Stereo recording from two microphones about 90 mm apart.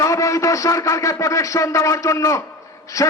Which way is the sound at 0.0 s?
35° left (ahead or behind).